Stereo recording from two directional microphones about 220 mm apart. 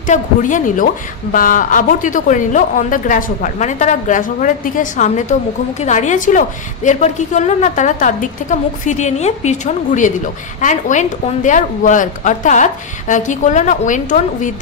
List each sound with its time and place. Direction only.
0.0 s a woman's voice: 35° left (ahead or behind)